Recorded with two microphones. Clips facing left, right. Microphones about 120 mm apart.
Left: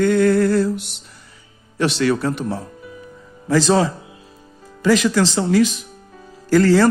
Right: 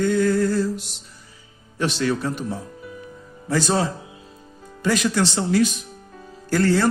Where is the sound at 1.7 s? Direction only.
75° left (ahead or behind).